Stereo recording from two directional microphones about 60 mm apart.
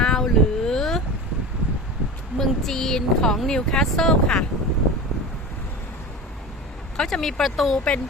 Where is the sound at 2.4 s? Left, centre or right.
Centre.